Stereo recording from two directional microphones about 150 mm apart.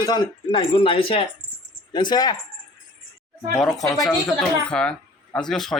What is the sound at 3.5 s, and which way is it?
Speech, centre (ahead or behind).